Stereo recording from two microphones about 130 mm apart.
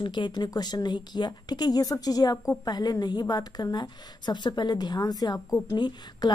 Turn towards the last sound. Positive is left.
turn(degrees=35)  # may be behind; listen again after turning